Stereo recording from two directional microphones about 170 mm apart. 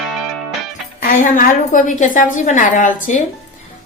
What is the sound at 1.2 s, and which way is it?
A woman's voice, 50° left (ahead or behind).